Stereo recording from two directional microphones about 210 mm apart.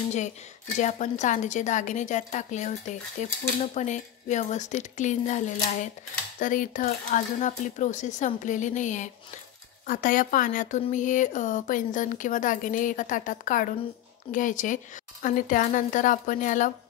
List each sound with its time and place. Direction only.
0.7 s a woman's voice: 35° left (ahead or behind)